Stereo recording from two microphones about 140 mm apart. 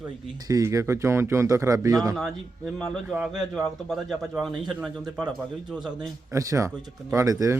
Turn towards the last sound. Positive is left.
turn(degrees=-25)  # may be behind; listen again after turning